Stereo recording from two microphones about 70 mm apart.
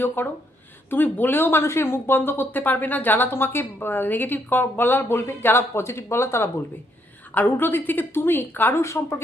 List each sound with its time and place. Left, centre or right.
0.2 s speech: left
7.3 s speech: left
8.8 s speech: left